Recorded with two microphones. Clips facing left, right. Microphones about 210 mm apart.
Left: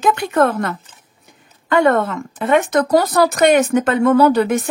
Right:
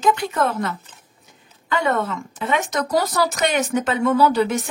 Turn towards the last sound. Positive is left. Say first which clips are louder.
# left 5 dB
turn(degrees=55)  # may be behind; listen again after turning